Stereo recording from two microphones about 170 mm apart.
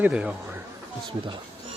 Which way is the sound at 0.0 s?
5° right (ahead or behind).